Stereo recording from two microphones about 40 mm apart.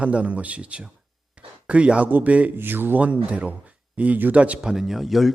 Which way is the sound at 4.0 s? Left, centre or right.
Right.